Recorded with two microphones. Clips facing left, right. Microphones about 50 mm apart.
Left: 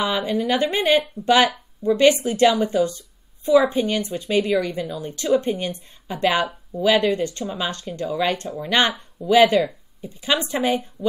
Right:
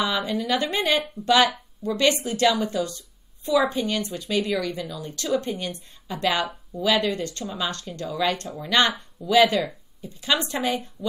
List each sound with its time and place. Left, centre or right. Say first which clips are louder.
0.0 s a woman's voice: left 3 dB; left